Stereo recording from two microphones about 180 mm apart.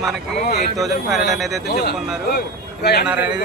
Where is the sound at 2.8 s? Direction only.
65° left (ahead or behind).